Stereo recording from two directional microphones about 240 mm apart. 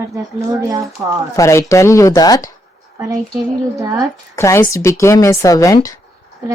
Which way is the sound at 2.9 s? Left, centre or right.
Centre.